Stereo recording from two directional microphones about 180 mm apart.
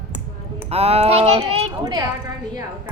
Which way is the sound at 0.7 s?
35° right (ahead or behind).